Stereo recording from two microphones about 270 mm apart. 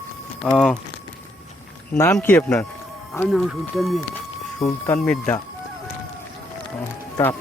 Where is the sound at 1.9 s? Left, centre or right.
Centre.